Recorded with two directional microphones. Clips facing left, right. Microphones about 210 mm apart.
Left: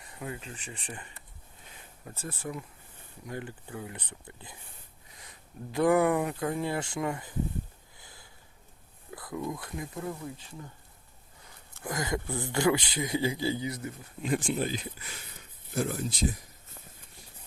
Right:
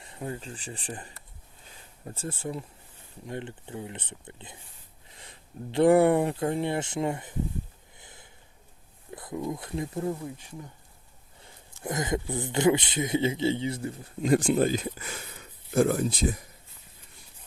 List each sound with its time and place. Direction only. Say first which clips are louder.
0.0 s speech: right 3 dB; 30° right (ahead or behind)
7.9 s a sound: right 3 dB; 20° right (ahead or behind)
9.0 s speech: right 2 dB; 25° right (ahead or behind)
11.8 s speech: right 3 dB; 20° right (ahead or behind); by 16.1 s 55° right (ahead or behind)